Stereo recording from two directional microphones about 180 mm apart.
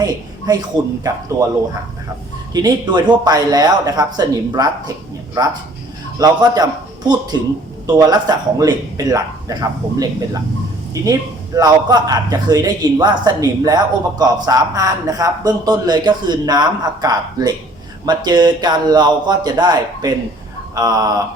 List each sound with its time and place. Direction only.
0.0 s a man's voice: 20° right (ahead or behind)
2.5 s a man's voice: 20° right (ahead or behind)